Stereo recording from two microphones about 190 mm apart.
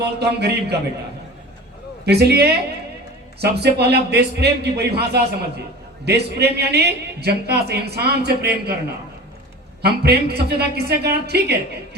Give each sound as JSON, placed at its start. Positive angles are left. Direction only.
{"t": 0.0, "sound": "a woman's voice", "side_deg": -60}
{"t": 2.0, "sound": "a woman's voice", "side_deg": -60}
{"t": 9.8, "sound": "a woman's voice", "side_deg": -60}